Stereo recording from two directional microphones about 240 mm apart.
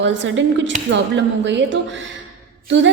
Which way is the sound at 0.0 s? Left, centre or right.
Right.